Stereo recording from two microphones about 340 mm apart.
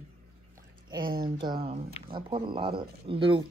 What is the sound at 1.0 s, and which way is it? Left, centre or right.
Speech, right.